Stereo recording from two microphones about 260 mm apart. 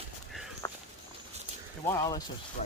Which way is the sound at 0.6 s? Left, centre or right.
Centre.